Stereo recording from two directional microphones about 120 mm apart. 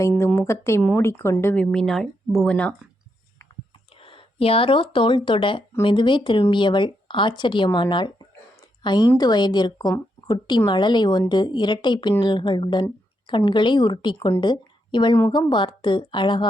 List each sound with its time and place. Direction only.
0.3 s speech: 20° left (ahead or behind)
1.5 s speech: 5° left (ahead or behind)
4.0 s a woman's voice: 50° left (ahead or behind)
14.4 s a sound: 40° left (ahead or behind)
15.3 s a woman's voice: 40° left (ahead or behind)